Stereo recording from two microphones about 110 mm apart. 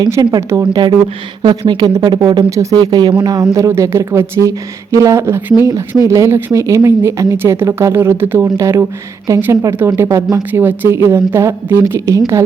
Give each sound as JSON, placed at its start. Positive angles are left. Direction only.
{"t": 0.1, "sound": "speech", "side_deg": -35}
{"t": 1.4, "sound": "speech", "side_deg": -45}
{"t": 2.5, "sound": "speech", "side_deg": -30}
{"t": 2.8, "sound": "speech", "side_deg": -40}